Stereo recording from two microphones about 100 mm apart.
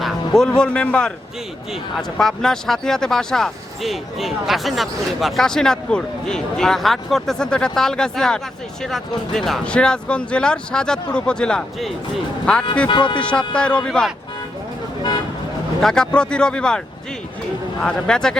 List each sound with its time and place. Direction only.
0.0 s a man's voice: 5° left (ahead or behind)
12.9 s speech: 55° left (ahead or behind)
13.5 s speech: 10° left (ahead or behind)
15.8 s speech: 5° left (ahead or behind)
17.8 s speech: 5° left (ahead or behind)